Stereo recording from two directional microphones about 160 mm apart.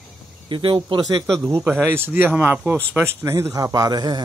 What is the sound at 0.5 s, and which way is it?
Speech, 30° right (ahead or behind).